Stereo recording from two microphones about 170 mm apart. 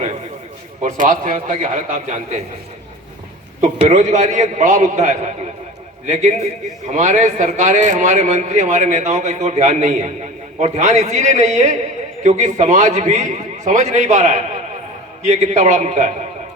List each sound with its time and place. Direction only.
0.8 s a man's voice: 45° right (ahead or behind)
3.6 s a man's voice: 40° right (ahead or behind)